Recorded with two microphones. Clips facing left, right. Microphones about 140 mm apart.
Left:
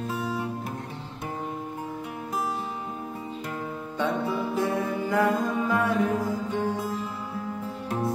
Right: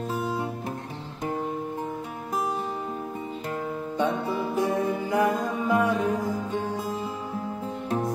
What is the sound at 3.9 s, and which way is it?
Music, 15° right (ahead or behind).